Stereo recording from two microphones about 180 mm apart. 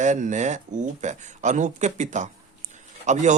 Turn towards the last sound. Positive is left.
turn(degrees=-40)  # may be behind; listen again after turning